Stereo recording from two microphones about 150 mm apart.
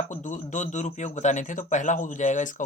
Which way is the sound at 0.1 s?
55° left (ahead or behind).